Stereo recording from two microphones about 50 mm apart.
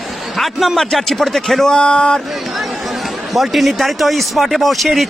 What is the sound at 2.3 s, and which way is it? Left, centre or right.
Speech, centre.